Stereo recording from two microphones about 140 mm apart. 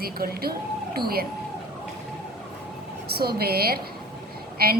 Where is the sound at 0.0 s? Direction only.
90° right.